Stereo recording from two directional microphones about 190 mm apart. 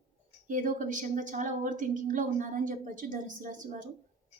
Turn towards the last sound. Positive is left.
turn(degrees=-40)  # may be behind; listen again after turning